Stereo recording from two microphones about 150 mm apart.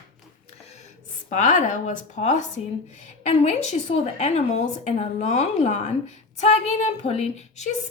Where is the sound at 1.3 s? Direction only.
55° left (ahead or behind).